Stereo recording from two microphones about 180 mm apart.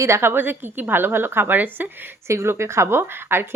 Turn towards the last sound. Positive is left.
turn(degrees=-15)  # may be behind; listen again after turning